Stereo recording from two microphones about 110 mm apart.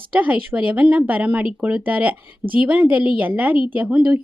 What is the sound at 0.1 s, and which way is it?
Speech, 15° right (ahead or behind).